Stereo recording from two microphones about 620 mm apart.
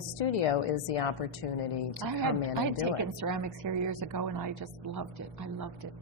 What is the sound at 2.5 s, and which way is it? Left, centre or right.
Speech, right.